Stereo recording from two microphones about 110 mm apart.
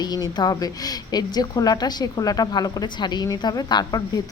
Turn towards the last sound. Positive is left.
turn(degrees=40)  # may be behind; listen again after turning